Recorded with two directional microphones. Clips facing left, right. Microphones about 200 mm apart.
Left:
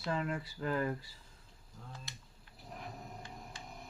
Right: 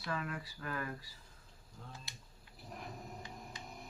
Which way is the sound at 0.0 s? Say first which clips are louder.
Left 5 dB; 25° left (ahead or behind).